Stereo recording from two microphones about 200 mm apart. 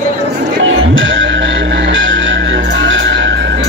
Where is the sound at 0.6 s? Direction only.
70° right (ahead or behind).